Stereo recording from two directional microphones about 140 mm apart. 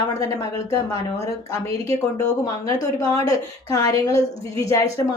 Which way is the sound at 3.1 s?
25° left (ahead or behind).